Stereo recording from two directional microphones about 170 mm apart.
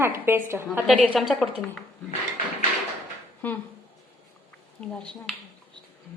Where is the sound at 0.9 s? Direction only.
Centre (ahead or behind).